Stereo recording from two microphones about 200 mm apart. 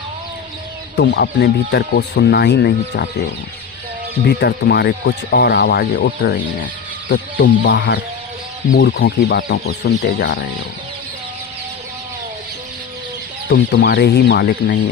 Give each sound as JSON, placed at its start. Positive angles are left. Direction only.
{"t": 0.9, "sound": "speech", "side_deg": 55}
{"t": 4.3, "sound": "speech", "side_deg": 55}
{"t": 13.5, "sound": "speech", "side_deg": 55}